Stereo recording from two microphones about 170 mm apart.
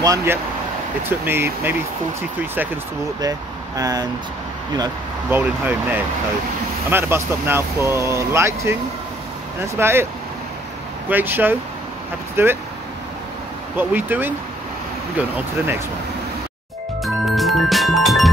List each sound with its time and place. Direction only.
0.0 s speech: 20° right (ahead or behind)
3.2 s speech: 20° right (ahead or behind)
5.3 s speech: 10° right (ahead or behind)
9.8 s speech: 15° right (ahead or behind)
11.1 s speech: 10° right (ahead or behind)
13.7 s speech: 10° right (ahead or behind)
17.0 s music: centre (ahead or behind)